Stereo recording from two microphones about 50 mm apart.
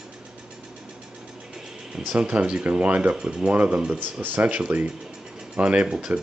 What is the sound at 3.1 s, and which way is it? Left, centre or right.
Speech, centre.